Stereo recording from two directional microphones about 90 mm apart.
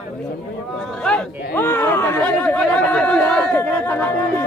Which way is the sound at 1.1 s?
5° left (ahead or behind).